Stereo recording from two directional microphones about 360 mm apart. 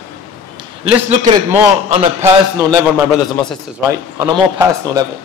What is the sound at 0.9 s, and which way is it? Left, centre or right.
A man's voice, centre.